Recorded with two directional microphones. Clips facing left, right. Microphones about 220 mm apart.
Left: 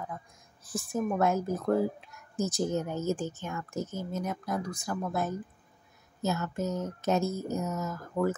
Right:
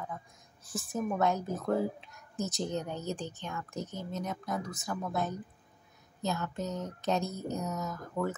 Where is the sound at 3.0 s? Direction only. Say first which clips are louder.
Left 6 dB; 45° left (ahead or behind).